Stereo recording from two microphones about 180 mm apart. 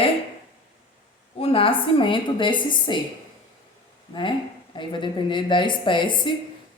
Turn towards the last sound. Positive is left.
turn(degrees=25)  # may be behind; listen again after turning